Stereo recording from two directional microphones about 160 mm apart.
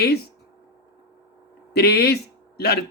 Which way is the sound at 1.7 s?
85° left.